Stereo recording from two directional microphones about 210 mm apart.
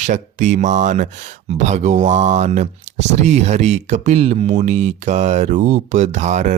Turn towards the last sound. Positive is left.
turn(degrees=-35)  # may be behind; listen again after turning